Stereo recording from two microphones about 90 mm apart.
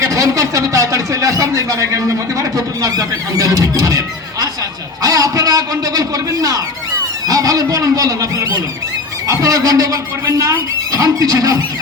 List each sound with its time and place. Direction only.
0.0 s speech: 35° right (ahead or behind)